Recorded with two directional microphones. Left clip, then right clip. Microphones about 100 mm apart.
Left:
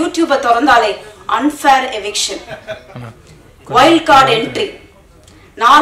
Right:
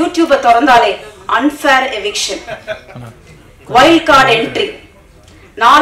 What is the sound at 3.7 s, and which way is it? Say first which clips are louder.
A woman's voice: right 1 dB; 20° left (ahead or behind).